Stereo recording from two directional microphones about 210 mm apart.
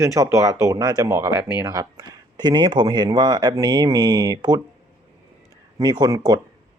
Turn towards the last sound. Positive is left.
turn(degrees=-20)  # may be behind; listen again after turning